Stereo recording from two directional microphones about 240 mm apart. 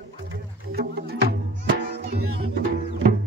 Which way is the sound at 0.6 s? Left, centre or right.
Right.